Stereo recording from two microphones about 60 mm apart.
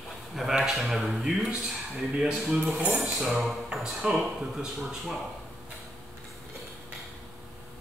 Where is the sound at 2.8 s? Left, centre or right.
Right.